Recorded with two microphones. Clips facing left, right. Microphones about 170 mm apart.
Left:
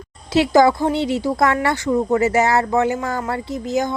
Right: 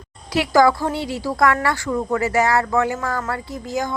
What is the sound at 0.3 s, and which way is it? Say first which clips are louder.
Speech: left 2 dB; 25° left (ahead or behind).